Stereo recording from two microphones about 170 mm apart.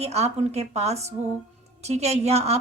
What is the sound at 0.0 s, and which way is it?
A woman's voice, 40° right (ahead or behind).